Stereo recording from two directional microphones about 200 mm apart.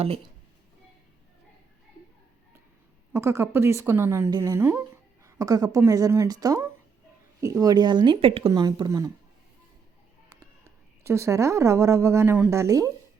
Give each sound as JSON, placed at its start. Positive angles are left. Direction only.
{"t": 3.1, "sound": "a woman's voice", "side_deg": -15}
{"t": 10.2, "sound": "a woman's voice", "side_deg": -15}